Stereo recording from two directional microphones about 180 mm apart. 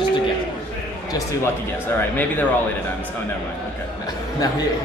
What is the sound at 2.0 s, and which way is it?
Speech, 10° left (ahead or behind).